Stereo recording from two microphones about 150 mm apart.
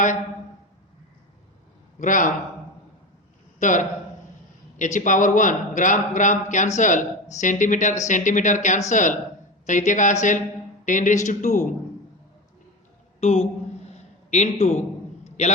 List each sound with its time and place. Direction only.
2.0 s a man's voice: 60° left (ahead or behind)
3.6 s a man's voice: 55° left (ahead or behind)
13.1 s speech: 45° left (ahead or behind)
13.9 s a sound: 50° left (ahead or behind)